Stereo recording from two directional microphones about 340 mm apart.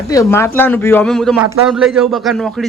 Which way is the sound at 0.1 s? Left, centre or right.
Centre.